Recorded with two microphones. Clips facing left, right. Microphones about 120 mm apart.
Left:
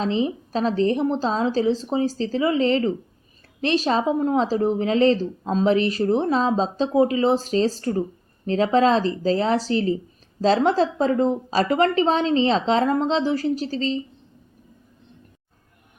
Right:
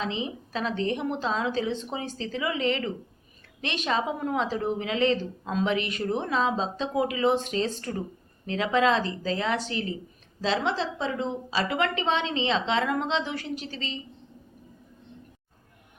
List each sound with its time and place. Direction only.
0.0 s a woman's voice: 35° left (ahead or behind)